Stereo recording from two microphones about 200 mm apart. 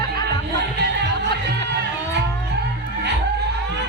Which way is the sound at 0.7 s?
60° right (ahead or behind).